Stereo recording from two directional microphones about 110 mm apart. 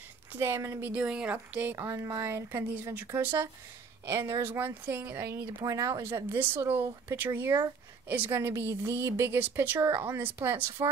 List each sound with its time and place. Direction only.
0.3 s speech: 25° right (ahead or behind)
1.9 s speech: 30° right (ahead or behind)